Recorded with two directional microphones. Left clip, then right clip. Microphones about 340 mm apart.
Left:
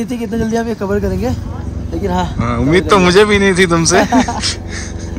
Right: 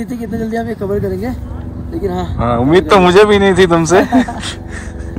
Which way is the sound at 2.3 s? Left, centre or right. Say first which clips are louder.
Right 5 dB; centre.